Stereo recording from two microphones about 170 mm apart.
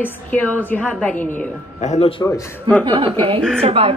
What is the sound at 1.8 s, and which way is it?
Speech, 40° left (ahead or behind).